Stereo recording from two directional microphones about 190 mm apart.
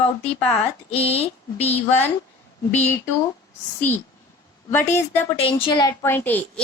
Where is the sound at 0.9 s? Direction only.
30° left (ahead or behind).